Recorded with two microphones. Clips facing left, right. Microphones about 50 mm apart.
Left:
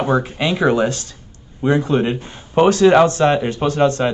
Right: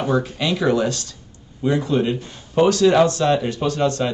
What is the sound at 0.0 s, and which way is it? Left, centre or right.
A man's voice, left.